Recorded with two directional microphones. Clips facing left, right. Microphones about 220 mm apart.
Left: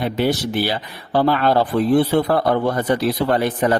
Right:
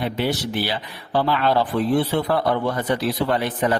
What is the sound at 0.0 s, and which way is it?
Speech, 45° left (ahead or behind).